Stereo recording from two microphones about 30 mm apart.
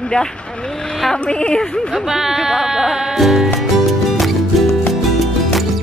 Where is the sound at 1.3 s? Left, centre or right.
Left.